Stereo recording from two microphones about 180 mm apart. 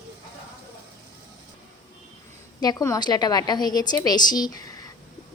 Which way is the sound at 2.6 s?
20° left (ahead or behind).